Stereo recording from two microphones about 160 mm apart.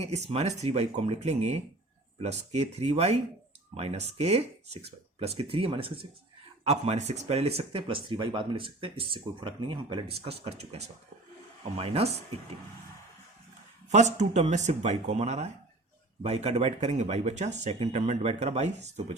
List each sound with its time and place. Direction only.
0.0 s speech: 40° right (ahead or behind)
13.9 s speech: 45° right (ahead or behind)